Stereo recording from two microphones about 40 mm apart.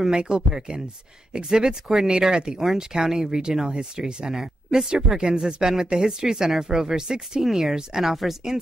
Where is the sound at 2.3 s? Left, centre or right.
Right.